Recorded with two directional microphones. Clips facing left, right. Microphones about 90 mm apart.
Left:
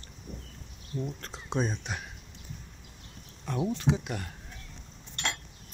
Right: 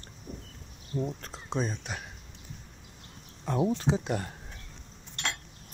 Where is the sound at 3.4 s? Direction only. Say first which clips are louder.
Right 2 dB; 30° right (ahead or behind).